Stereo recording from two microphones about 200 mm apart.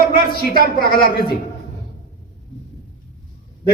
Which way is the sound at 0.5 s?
50° left (ahead or behind).